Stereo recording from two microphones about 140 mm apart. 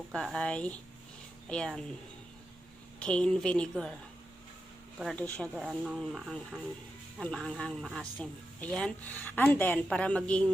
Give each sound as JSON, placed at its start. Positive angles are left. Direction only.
{"t": 0.1, "sound": "speech", "side_deg": 5}
{"t": 3.0, "sound": "speech", "side_deg": 5}
{"t": 5.1, "sound": "speech", "side_deg": 10}
{"t": 5.5, "sound": "speech", "side_deg": -5}